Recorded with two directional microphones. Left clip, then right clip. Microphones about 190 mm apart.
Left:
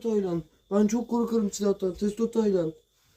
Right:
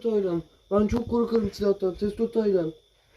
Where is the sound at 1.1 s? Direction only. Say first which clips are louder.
Right 3 dB; 10° left (ahead or behind); by 2.6 s 25° left (ahead or behind).